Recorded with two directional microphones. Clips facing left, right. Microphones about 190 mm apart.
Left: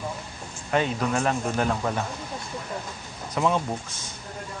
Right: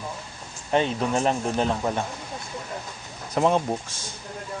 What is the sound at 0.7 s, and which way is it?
Speech, 25° right (ahead or behind).